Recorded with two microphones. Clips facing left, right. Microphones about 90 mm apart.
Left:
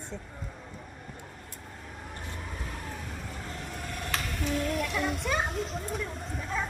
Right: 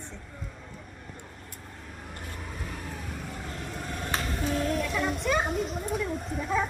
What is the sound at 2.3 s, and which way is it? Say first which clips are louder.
Vehicle: right 2 dB; 5° right (ahead or behind).